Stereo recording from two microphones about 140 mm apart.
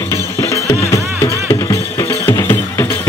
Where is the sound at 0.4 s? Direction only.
20° left (ahead or behind).